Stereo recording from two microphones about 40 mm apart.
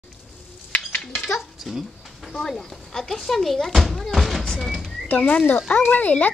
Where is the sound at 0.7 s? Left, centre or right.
Left.